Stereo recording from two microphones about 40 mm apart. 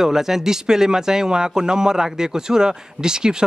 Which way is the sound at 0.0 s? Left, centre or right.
Centre.